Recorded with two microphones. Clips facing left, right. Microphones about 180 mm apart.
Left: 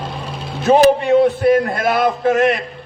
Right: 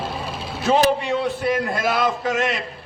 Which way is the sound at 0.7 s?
55° left (ahead or behind).